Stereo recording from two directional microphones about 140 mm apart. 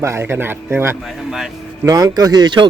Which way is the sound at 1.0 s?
Centre (ahead or behind).